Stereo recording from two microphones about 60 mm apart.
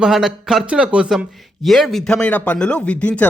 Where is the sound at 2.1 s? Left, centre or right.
Centre.